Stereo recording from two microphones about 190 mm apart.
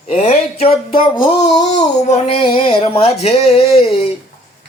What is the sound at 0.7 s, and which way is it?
Speech, 30° left (ahead or behind).